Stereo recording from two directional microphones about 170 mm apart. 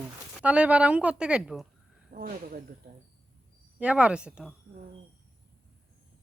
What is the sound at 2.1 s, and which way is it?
Speech, 60° right (ahead or behind).